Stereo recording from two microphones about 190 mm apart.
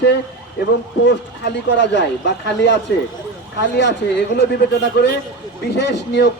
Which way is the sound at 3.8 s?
70° left (ahead or behind).